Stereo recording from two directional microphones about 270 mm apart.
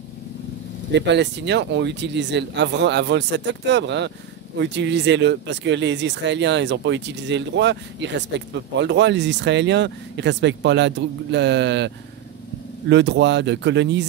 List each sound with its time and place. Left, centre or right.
0.9 s speech: right